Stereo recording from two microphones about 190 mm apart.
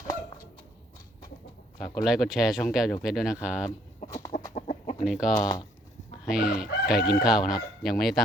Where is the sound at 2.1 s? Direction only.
Centre (ahead or behind).